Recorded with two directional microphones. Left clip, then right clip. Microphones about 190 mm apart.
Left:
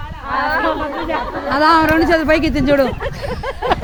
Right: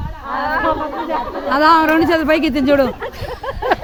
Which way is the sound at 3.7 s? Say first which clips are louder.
Right 1 dB; 5° left (ahead or behind).